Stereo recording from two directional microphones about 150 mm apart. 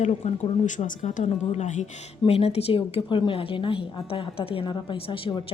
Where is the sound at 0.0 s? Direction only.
50° left (ahead or behind).